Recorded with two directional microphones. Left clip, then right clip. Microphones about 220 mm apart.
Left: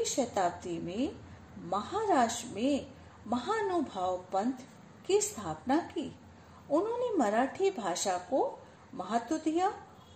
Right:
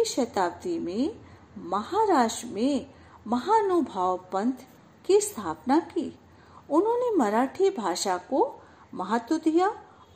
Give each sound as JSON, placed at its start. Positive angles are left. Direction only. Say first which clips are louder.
{"t": 0.0, "sound": "a woman's voice", "louder": "right 5 dB", "side_deg": -40}